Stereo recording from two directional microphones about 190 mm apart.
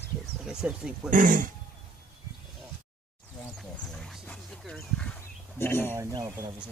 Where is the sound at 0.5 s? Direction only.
5° right (ahead or behind).